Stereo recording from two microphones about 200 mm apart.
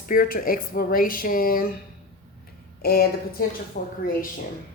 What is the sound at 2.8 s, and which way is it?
A woman's voice, 50° left (ahead or behind).